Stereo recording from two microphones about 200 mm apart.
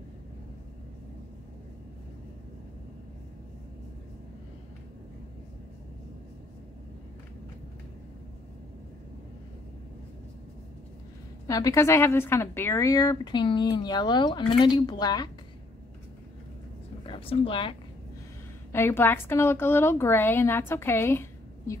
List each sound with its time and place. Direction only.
11.4 s speech: 15° left (ahead or behind)
17.0 s speech: 25° left (ahead or behind)
18.7 s a woman's voice: 10° left (ahead or behind)